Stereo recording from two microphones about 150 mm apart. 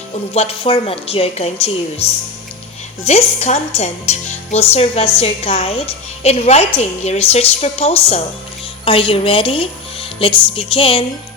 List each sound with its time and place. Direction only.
0.3 s a woman's voice: 40° left (ahead or behind)
3.1 s a woman's voice: 45° left (ahead or behind)